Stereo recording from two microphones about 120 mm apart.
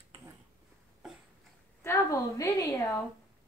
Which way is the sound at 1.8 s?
20° left (ahead or behind).